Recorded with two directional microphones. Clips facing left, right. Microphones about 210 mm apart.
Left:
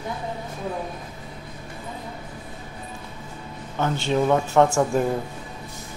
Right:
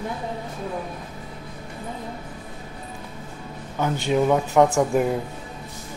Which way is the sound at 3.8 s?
10° right (ahead or behind).